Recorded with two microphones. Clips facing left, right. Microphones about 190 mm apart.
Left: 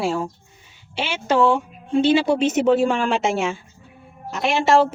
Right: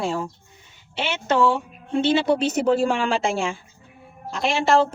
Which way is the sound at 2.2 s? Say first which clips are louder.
Left 2 dB; 25° left (ahead or behind).